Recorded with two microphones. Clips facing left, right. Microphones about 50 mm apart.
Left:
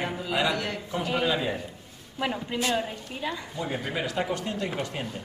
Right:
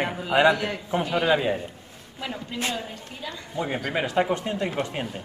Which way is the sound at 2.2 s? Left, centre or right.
Centre.